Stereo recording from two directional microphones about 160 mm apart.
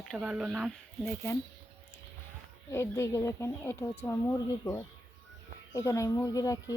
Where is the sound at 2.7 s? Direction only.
15° left (ahead or behind).